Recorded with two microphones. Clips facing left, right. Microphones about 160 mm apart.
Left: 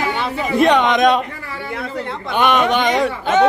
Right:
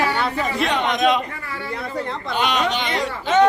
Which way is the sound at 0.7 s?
85° left.